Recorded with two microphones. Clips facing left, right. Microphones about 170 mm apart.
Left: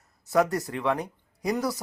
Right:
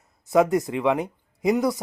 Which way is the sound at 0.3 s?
20° right (ahead or behind).